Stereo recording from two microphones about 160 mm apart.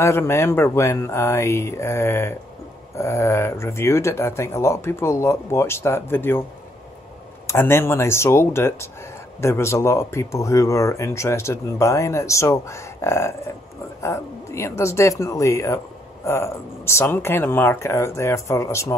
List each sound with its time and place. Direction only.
0.0 s speech: 15° left (ahead or behind)
7.4 s speech: 15° left (ahead or behind)